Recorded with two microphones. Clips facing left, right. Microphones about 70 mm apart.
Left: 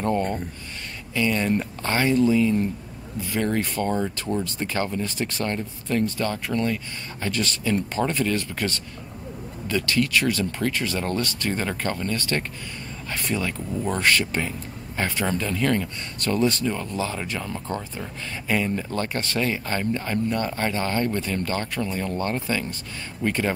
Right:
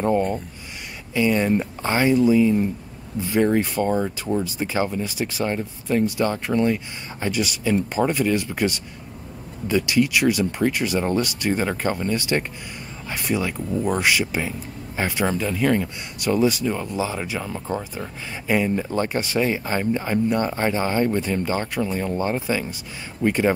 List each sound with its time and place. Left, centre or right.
0.0 s speech: centre
3.2 s speech: right